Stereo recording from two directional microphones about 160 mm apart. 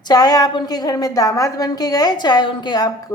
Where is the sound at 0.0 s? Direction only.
25° left (ahead or behind).